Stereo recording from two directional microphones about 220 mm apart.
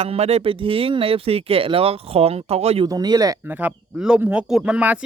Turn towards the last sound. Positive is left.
turn(degrees=-5)  # may be behind; listen again after turning